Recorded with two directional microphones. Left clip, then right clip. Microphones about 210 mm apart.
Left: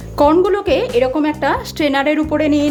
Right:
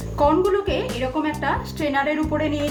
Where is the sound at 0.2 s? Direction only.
50° left (ahead or behind).